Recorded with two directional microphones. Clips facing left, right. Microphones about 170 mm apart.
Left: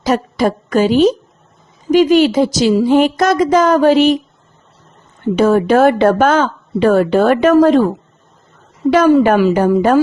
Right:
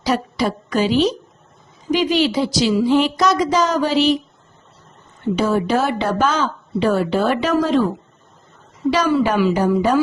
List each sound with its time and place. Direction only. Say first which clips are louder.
0.0 s a woman's voice: left 5 dB; 50° left (ahead or behind)
5.4 s speech: left 8 dB; 55° left (ahead or behind)
8.9 s speech: left 7 dB; 50° left (ahead or behind)